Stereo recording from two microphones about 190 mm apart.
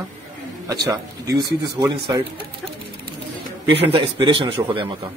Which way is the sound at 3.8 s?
30° right (ahead or behind).